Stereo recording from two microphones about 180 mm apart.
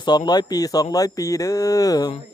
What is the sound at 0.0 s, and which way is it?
A man's voice, 25° left (ahead or behind).